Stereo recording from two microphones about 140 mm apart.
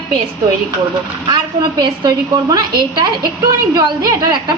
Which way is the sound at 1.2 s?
35° right (ahead or behind).